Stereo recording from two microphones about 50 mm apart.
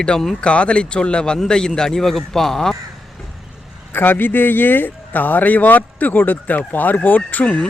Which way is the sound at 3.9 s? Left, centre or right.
Left.